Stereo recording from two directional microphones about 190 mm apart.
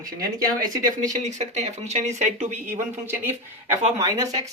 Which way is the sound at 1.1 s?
40° right (ahead or behind).